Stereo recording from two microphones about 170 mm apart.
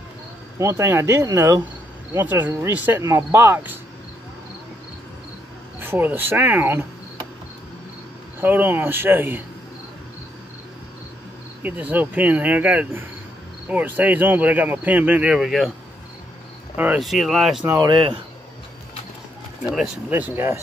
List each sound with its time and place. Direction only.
0.6 s speech: 15° right (ahead or behind)
5.8 s speech: 10° right (ahead or behind)
8.4 s speech: 10° right (ahead or behind)
11.6 s speech: 10° right (ahead or behind)
16.7 s speech: 10° right (ahead or behind)
17.6 s speech: 20° right (ahead or behind)
17.9 s speech: 30° right (ahead or behind)
19.6 s speech: 5° right (ahead or behind)